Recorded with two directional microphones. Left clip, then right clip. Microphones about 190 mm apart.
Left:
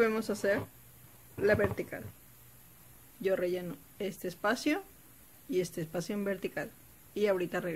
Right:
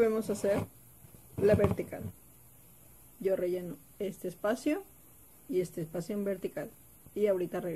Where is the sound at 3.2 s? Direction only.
Centre (ahead or behind).